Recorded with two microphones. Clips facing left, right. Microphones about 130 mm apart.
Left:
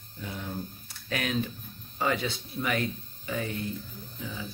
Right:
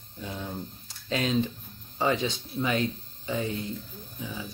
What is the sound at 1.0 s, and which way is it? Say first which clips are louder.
Speech: right 4 dB; 25° right (ahead or behind).